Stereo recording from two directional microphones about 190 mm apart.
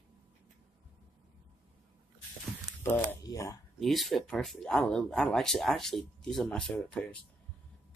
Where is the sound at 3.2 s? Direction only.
20° left (ahead or behind).